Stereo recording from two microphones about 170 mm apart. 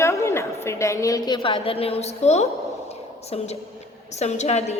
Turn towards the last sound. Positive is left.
turn(degrees=40)  # may be behind; listen again after turning